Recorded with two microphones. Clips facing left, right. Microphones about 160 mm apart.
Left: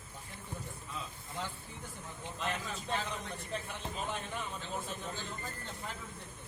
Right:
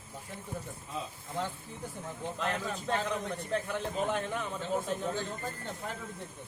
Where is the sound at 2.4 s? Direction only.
60° right (ahead or behind).